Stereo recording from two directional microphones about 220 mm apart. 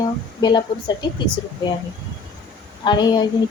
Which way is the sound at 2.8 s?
20° left (ahead or behind).